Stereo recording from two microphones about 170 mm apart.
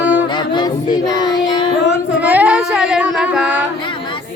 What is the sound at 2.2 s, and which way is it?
Child singing, 10° right (ahead or behind).